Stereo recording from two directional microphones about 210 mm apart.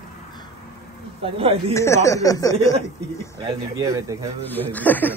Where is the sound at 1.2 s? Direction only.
25° right (ahead or behind).